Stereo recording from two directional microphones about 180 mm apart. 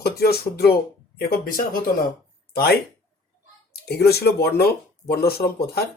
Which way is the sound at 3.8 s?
65° left (ahead or behind).